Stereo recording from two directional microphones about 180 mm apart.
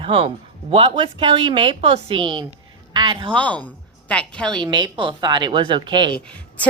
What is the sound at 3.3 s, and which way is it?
A woman's voice, 5° left (ahead or behind).